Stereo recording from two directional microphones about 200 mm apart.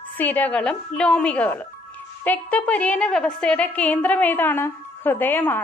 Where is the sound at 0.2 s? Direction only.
10° left (ahead or behind).